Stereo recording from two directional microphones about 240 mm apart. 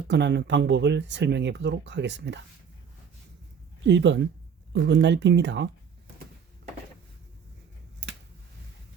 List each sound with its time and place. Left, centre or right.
0.1 s speech: right
3.8 s speech: right